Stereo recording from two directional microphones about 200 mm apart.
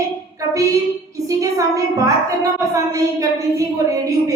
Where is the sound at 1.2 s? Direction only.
15° right (ahead or behind).